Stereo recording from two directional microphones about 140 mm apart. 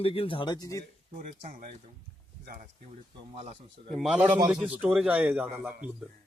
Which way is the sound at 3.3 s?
50° right (ahead or behind).